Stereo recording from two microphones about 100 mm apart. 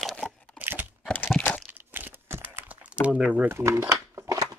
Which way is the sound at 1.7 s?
20° right (ahead or behind).